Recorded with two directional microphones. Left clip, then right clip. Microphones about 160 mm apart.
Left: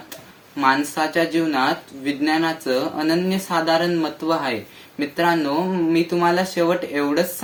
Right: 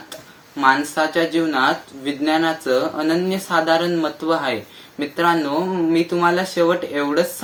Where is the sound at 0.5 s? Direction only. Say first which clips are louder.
Right 2 dB; 20° left (ahead or behind).